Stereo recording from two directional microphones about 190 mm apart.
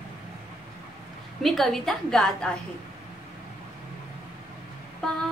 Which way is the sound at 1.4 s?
Centre (ahead or behind).